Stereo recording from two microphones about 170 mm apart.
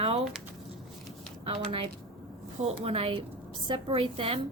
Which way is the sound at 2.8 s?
35° right (ahead or behind).